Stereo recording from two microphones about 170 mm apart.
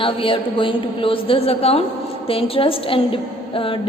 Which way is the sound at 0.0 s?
30° left (ahead or behind).